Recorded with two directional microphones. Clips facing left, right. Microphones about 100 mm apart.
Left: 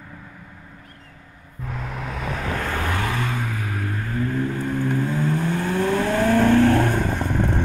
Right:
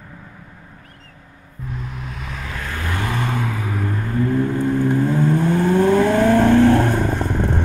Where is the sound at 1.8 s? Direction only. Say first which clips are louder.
Left 6 dB; 80° left; by 2.8 s 65° left (ahead or behind).